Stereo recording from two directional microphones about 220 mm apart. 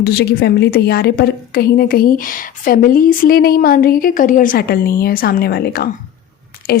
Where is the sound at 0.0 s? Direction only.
45° left (ahead or behind).